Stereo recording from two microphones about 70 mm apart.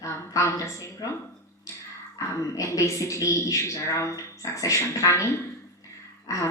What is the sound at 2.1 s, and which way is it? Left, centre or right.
A woman's voice, left.